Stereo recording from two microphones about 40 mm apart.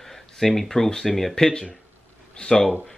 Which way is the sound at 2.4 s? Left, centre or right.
Left.